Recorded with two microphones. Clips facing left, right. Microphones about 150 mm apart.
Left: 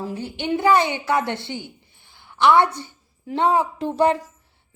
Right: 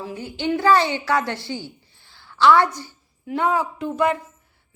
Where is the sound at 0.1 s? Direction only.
30° left (ahead or behind).